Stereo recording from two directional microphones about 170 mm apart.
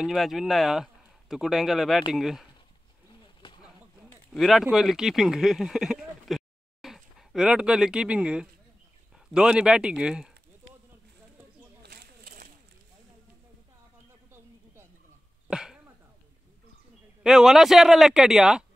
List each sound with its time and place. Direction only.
0.0 s a man's voice: centre (ahead or behind)
3.4 s a sound: 30° left (ahead or behind)
4.3 s a man's voice: centre (ahead or behind)
11.8 s a sound: 65° right (ahead or behind)
15.5 s cough: 5° right (ahead or behind)
17.2 s a man's voice: 5° right (ahead or behind)